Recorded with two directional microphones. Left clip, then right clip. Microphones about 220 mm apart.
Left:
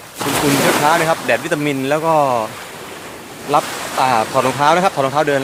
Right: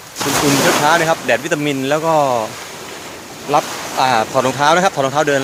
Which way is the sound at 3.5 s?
Centre (ahead or behind).